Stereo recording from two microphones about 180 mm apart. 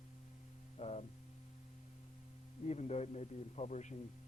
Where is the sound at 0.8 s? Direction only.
35° left (ahead or behind).